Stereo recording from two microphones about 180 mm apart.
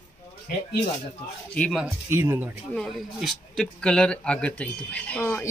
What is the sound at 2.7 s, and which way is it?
Speech, centre (ahead or behind).